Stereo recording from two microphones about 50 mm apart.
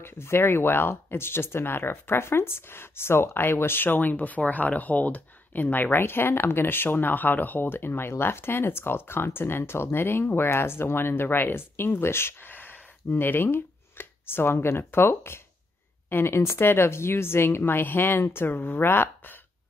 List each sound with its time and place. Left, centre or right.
0.0 s speech: left